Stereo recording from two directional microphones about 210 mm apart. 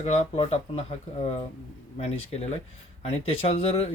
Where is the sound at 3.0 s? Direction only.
30° left (ahead or behind).